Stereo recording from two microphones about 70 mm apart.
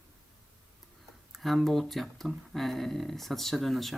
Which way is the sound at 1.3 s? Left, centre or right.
Centre.